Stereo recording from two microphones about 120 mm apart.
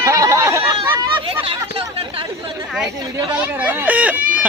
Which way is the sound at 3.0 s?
35° right (ahead or behind).